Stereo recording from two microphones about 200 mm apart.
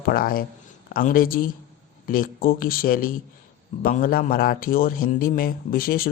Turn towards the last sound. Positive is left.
turn(degrees=45)  # may be behind; listen again after turning